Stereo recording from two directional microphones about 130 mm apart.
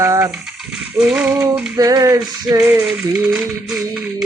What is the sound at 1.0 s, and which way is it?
Music, 10° right (ahead or behind).